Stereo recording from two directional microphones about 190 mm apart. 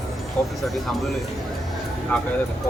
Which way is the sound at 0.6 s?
Centre (ahead or behind).